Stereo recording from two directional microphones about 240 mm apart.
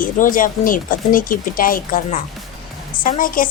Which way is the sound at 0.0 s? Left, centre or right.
Left.